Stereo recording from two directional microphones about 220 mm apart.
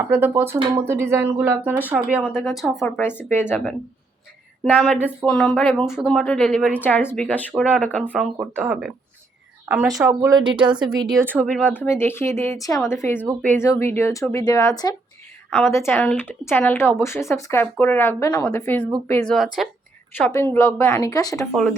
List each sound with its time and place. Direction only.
0.1 s speech: 10° right (ahead or behind); by 8.1 s 5° left (ahead or behind)
8.1 s speech: 5° right (ahead or behind)
10.1 s speech: 15° right (ahead or behind)
11.2 s speech: 10° right (ahead or behind)
11.4 s speech: 5° left (ahead or behind)
21.5 s speech: 5° left (ahead or behind)